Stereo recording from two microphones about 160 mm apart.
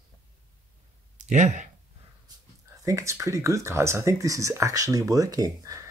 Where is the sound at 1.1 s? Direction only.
50° right (ahead or behind).